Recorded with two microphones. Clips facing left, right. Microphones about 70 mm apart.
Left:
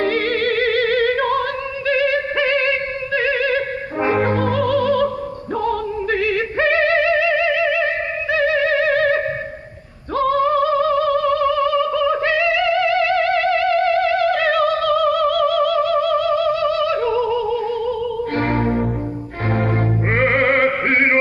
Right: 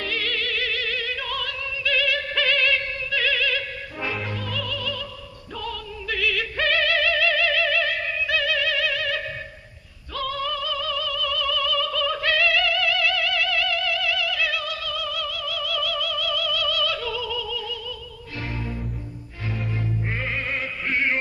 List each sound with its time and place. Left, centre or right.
0.0 s opera: left
4.2 s music: left
5.6 s opera: left
10.2 s music: left
18.3 s music: left
20.1 s music: left